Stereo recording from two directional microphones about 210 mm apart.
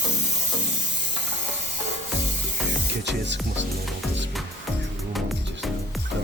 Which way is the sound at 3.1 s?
55° right (ahead or behind).